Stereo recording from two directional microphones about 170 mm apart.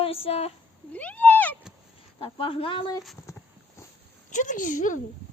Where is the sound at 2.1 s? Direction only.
35° left (ahead or behind).